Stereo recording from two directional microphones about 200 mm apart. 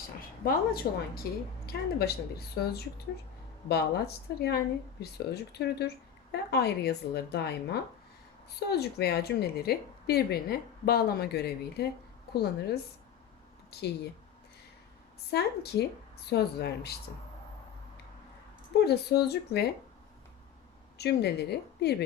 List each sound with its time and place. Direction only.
0.2 s a woman's voice: 50° left (ahead or behind)
3.7 s a woman's voice: 55° left (ahead or behind)
15.3 s speech: 55° left (ahead or behind)
18.9 s a woman's voice: 55° left (ahead or behind)
21.0 s speech: 55° left (ahead or behind)